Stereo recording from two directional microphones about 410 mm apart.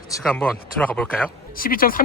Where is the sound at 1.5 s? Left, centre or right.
Left.